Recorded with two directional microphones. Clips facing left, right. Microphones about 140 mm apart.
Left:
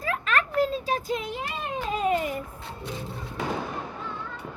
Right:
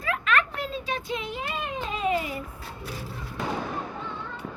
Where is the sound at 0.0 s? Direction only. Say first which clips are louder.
Right 1 dB; 40° left (ahead or behind).